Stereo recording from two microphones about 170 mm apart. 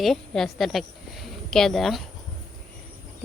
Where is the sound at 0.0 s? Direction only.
Centre (ahead or behind).